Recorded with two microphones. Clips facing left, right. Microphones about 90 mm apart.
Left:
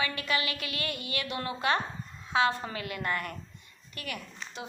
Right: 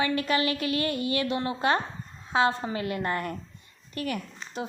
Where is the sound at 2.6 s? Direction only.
30° right (ahead or behind).